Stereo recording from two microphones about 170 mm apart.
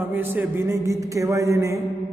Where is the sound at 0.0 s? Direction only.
10° right (ahead or behind).